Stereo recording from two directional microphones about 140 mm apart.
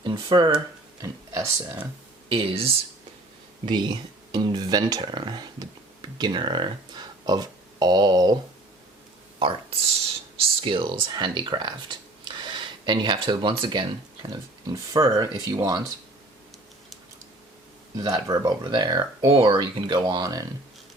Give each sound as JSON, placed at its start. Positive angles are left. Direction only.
{"t": 0.0, "sound": "speech", "side_deg": -35}
{"t": 2.3, "sound": "speech", "side_deg": -40}
{"t": 3.7, "sound": "speech", "side_deg": -30}
{"t": 9.4, "sound": "speech", "side_deg": -35}
{"t": 14.9, "sound": "speech", "side_deg": -20}
{"t": 18.0, "sound": "speech", "side_deg": -25}